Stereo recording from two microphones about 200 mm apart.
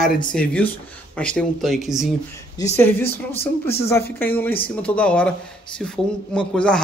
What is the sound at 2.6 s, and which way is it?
Speech, 20° left (ahead or behind).